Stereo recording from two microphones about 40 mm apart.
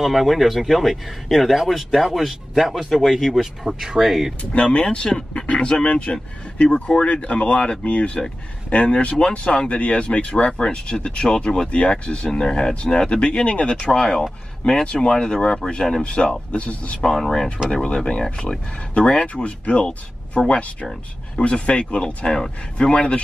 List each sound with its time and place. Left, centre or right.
0.0 s speech: centre
2.9 s speech: centre
3.6 s speech: centre
4.4 s speech: left
11.7 s speech: left
16.5 s speech: left
17.0 s speech: centre
17.8 s speech: left
18.9 s speech: left